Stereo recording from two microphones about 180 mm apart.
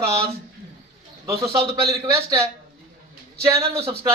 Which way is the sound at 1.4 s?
35° right (ahead or behind).